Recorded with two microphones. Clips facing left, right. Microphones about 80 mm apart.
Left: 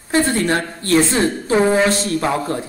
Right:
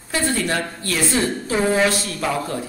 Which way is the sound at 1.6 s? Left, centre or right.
Left.